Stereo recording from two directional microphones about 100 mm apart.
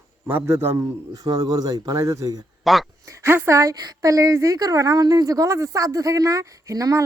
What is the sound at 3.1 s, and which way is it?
A woman's voice, 25° right (ahead or behind).